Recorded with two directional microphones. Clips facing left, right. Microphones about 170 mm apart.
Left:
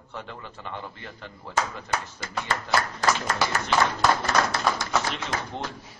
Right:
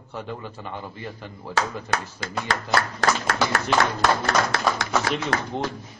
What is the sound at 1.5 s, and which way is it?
Speech, 75° right (ahead or behind).